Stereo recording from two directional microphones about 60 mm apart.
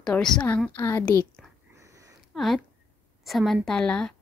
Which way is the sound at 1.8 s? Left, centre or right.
Right.